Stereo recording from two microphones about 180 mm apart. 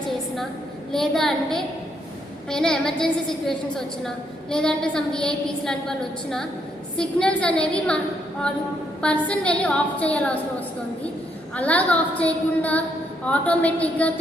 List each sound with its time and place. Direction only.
0.9 s a woman's voice: centre (ahead or behind)
6.9 s a woman's voice: 5° left (ahead or behind)
9.0 s a woman's voice: 5° left (ahead or behind)
11.5 s a woman's voice: 10° left (ahead or behind)